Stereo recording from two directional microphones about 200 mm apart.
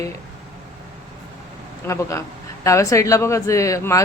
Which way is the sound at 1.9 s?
15° left (ahead or behind).